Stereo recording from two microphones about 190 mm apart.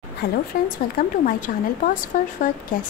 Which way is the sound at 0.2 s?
60° left (ahead or behind).